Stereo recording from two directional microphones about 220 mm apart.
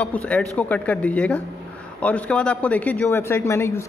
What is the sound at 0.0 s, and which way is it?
Speech, 5° left (ahead or behind).